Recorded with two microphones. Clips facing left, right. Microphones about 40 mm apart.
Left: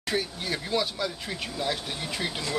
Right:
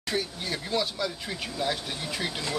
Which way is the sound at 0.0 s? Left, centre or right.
Centre.